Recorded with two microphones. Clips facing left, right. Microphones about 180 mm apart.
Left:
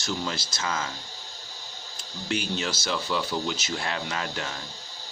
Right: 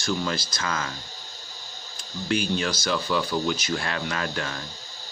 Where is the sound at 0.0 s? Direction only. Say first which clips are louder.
Right 4 dB; 20° left (ahead or behind).